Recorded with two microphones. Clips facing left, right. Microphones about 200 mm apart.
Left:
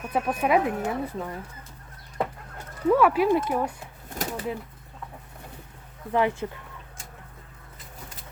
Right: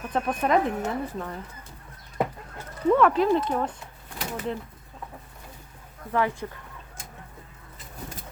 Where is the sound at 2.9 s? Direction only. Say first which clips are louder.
Even; 10° left (ahead or behind).